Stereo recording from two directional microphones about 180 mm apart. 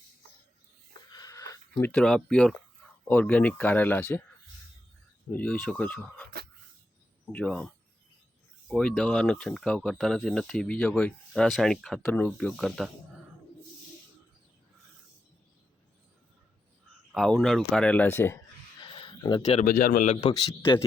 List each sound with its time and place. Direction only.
1.1 s a sound: 20° left (ahead or behind)
3.0 s speech: 10° left (ahead or behind)
5.3 s speech: 10° left (ahead or behind)
7.3 s speech: 5° left (ahead or behind)
17.1 s speech: centre (ahead or behind)
18.8 s a sound: 30° left (ahead or behind)
19.4 s a man's voice: 40° left (ahead or behind)
19.6 s a man's voice: 50° left (ahead or behind)